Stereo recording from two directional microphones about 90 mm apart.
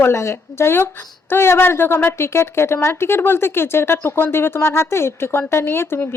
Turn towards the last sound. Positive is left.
turn(degrees=25)  # may be behind; listen again after turning